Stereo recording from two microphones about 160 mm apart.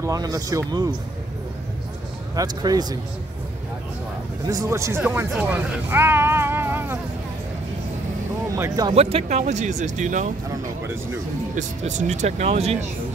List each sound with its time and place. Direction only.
0.0 s speech: 20° right (ahead or behind)
2.3 s speech: 25° right (ahead or behind)
4.5 s speech: 20° right (ahead or behind)
8.5 s speech: 20° right (ahead or behind)
8.9 s speech: 40° right (ahead or behind)
11.5 s speech: 50° right (ahead or behind)